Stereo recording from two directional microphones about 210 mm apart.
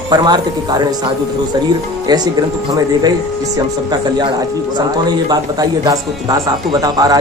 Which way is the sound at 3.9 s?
20° right (ahead or behind).